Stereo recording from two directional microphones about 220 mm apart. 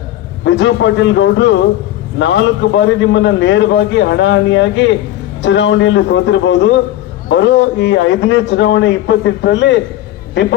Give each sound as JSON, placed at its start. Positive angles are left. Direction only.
{"t": 0.4, "sound": "a man's voice", "side_deg": 60}